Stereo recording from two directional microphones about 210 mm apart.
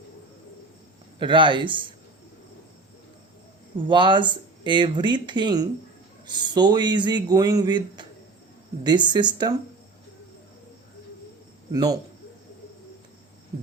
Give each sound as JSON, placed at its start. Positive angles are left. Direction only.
{"t": 1.2, "sound": "speech", "side_deg": -25}
{"t": 3.8, "sound": "speech", "side_deg": -20}
{"t": 11.7, "sound": "speech", "side_deg": -15}